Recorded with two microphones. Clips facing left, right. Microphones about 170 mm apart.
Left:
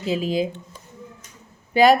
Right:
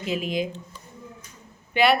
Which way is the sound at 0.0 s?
30° left (ahead or behind).